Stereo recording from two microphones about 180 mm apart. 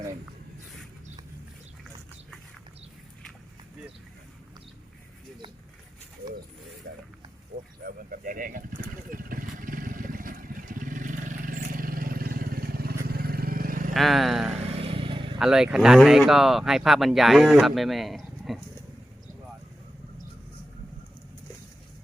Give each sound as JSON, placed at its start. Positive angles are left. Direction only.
{"t": 6.8, "sound": "a sound", "side_deg": -65}
{"t": 7.9, "sound": "vehicle", "side_deg": -50}
{"t": 13.9, "sound": "vehicle", "side_deg": 0}
{"t": 14.8, "sound": "vehicle", "side_deg": -30}
{"t": 15.4, "sound": "speech", "side_deg": -5}